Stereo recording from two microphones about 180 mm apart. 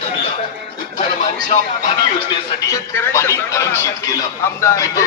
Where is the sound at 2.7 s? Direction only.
15° left (ahead or behind).